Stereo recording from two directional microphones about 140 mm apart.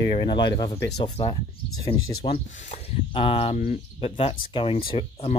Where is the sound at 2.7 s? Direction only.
50° left (ahead or behind).